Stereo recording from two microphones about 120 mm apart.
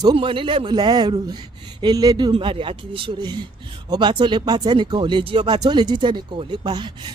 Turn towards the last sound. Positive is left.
turn(degrees=-40)  # may be behind; listen again after turning